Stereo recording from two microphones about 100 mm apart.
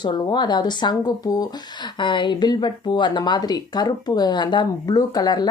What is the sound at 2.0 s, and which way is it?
A woman's voice, 50° left (ahead or behind).